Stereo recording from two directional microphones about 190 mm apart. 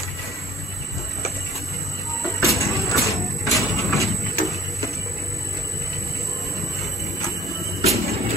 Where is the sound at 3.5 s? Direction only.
Centre (ahead or behind).